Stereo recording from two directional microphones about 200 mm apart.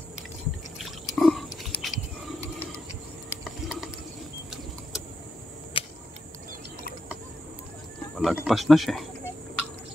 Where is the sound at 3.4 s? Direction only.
Centre (ahead or behind).